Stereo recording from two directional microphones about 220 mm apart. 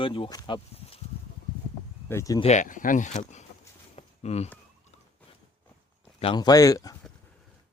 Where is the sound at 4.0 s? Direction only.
30° left (ahead or behind).